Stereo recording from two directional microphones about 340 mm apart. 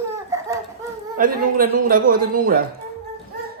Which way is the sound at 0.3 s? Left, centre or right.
Centre.